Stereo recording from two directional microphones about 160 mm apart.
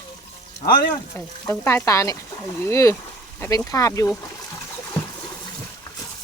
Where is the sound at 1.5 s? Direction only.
15° left (ahead or behind).